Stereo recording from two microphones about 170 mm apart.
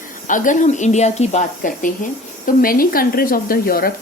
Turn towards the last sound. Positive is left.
turn(degrees=60)  # may be behind; listen again after turning